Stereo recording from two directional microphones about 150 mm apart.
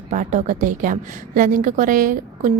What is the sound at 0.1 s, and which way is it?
A woman's voice, 55° right (ahead or behind).